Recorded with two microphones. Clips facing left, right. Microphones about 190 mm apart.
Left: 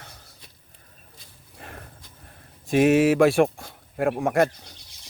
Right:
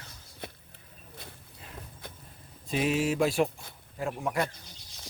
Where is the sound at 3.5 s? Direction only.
60° left (ahead or behind).